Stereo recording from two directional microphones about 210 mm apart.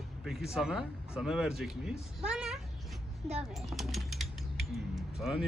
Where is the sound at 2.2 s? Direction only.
5° right (ahead or behind).